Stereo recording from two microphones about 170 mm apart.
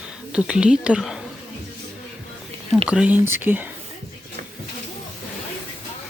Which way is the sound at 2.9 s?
10° right (ahead or behind).